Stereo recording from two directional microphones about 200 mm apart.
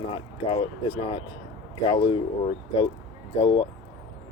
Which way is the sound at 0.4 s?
25° left (ahead or behind).